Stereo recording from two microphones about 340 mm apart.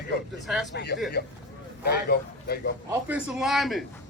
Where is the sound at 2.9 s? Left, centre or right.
Centre.